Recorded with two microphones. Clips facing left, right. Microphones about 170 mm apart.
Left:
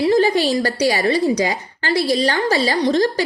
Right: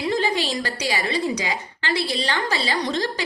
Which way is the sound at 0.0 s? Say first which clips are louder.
Left 8 dB; 40° left (ahead or behind).